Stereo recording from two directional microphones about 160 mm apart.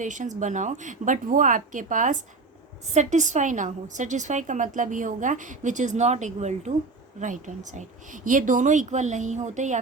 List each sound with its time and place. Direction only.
0.0 s a woman's voice: 50° right (ahead or behind)